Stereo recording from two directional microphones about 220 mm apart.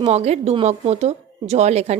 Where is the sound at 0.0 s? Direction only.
30° right (ahead or behind).